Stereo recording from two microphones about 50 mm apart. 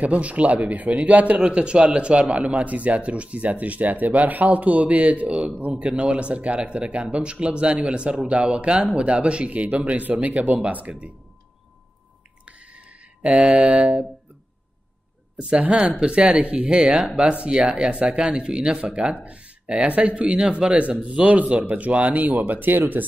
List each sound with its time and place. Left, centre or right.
0.0 s a man's voice: right
12.4 s a sound: right
15.3 s a man's voice: right